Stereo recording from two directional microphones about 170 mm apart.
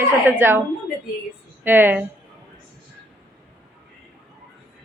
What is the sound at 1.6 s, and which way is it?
Speech, 10° right (ahead or behind).